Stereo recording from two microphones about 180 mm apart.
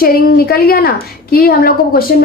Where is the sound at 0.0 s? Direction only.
55° left (ahead or behind).